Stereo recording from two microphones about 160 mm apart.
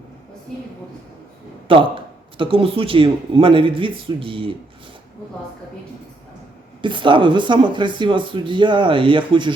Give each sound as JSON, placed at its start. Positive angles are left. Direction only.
{"t": 0.5, "sound": "a woman's voice", "side_deg": 5}
{"t": 1.6, "sound": "speech", "side_deg": -35}
{"t": 6.8, "sound": "speech", "side_deg": -30}